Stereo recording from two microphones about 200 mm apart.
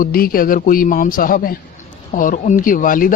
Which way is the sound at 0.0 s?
45° left (ahead or behind).